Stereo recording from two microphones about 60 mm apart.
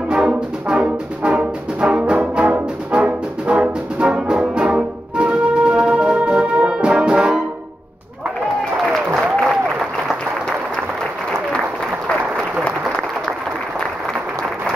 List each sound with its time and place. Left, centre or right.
0.1 s brass instrument: centre
8.9 s applause: centre